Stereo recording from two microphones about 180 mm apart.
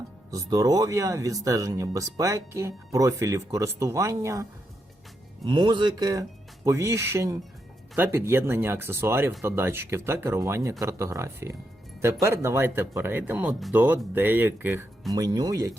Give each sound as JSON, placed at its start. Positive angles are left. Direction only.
{"t": 0.3, "sound": "speech", "side_deg": -20}
{"t": 5.5, "sound": "speech", "side_deg": -25}
{"t": 15.1, "sound": "speech", "side_deg": -20}